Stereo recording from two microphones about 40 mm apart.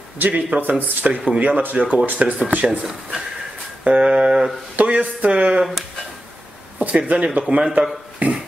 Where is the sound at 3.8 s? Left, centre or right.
Right.